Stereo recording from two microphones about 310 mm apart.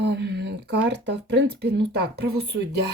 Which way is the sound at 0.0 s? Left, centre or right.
Right.